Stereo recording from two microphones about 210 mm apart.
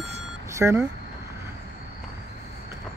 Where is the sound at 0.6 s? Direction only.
10° right (ahead or behind).